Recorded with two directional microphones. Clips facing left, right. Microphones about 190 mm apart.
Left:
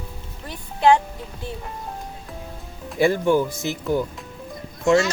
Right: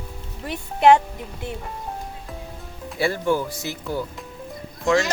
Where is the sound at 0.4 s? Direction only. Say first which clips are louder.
Right 2 dB; 20° right (ahead or behind).